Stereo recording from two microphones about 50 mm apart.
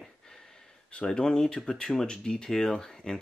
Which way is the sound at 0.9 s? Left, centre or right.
Centre.